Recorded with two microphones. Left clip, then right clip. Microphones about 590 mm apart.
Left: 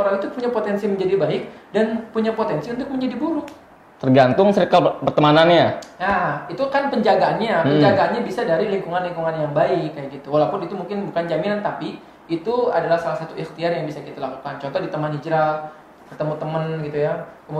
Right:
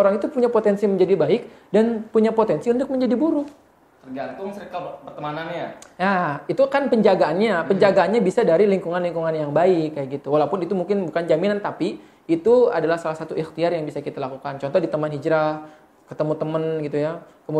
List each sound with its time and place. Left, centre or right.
0.4 s speech: right
4.1 s speech: left
5.9 s speech: right